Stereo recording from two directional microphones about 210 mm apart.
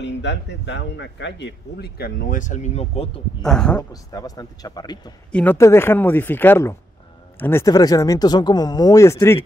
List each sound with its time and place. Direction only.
0.0 s speech: 55° left (ahead or behind); by 3.4 s 30° left (ahead or behind)
3.4 s speech: 5° left (ahead or behind)
3.9 s speech: 15° left (ahead or behind)